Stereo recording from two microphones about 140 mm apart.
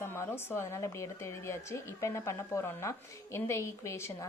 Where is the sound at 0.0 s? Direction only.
15° left (ahead or behind).